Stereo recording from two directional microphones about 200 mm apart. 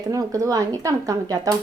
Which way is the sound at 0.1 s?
15° right (ahead or behind).